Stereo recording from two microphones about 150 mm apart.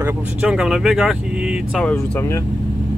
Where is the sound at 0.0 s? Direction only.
5° right (ahead or behind).